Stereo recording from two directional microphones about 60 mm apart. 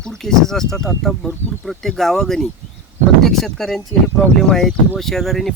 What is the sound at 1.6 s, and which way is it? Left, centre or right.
Speech, centre.